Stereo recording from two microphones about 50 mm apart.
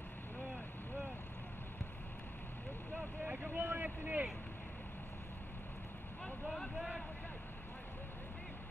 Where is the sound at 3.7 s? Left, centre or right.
Right.